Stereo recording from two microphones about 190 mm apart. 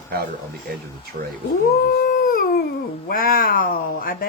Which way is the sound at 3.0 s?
50° left (ahead or behind).